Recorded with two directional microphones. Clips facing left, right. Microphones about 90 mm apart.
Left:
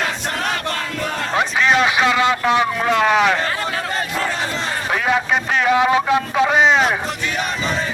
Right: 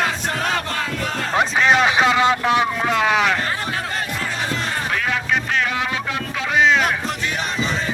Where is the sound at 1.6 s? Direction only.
25° right (ahead or behind).